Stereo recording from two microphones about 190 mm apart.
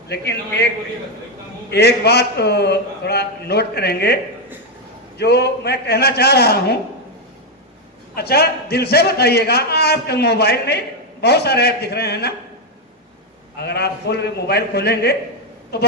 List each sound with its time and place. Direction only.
0.1 s a man's voice: 60° left (ahead or behind)
1.7 s a man's voice: 60° left (ahead or behind)
8.1 s a man's voice: 55° left (ahead or behind)
13.6 s a man's voice: 60° left (ahead or behind)